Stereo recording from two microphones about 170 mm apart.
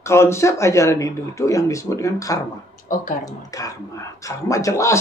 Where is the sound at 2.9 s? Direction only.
55° left (ahead or behind).